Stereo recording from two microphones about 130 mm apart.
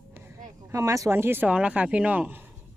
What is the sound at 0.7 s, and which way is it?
A woman's voice, 25° right (ahead or behind).